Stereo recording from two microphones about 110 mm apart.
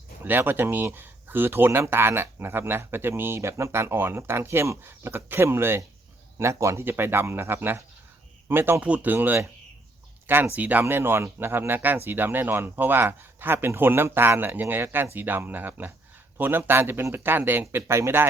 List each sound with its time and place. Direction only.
0.2 s speech: 20° right (ahead or behind)